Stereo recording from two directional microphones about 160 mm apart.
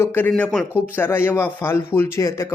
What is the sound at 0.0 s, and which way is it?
Speech, 15° left (ahead or behind).